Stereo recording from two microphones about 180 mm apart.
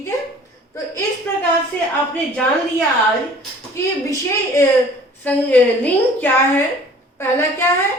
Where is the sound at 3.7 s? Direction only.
15° left (ahead or behind).